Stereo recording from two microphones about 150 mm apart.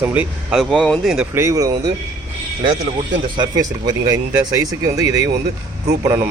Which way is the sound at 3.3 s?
25° right (ahead or behind).